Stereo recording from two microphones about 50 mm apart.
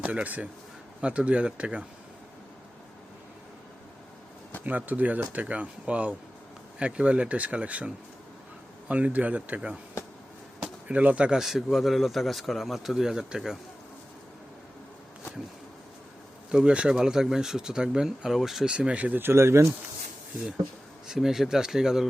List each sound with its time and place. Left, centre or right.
0.0 s speech: right
4.6 s speech: right
10.6 s a sound: right
11.3 s speech: centre
16.5 s speech: centre
18.7 s speech: right
19.2 s speech: right
21.1 s speech: centre